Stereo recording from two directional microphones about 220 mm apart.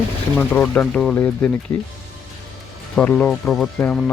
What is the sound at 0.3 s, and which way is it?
Speech, 5° left (ahead or behind).